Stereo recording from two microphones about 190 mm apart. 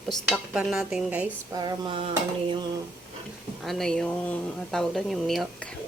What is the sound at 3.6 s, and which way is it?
Speech, centre (ahead or behind).